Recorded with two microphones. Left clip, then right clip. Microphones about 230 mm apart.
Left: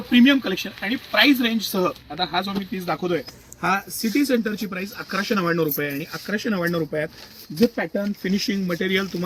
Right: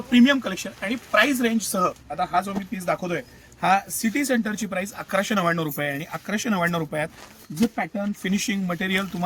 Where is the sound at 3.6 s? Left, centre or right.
Right.